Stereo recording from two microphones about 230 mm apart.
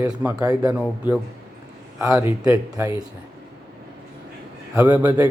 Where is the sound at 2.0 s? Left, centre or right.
Centre.